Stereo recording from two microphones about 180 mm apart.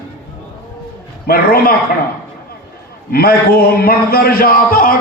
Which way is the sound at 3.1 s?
55° left (ahead or behind).